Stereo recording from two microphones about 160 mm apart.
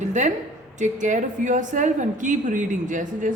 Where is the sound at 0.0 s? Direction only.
50° right (ahead or behind).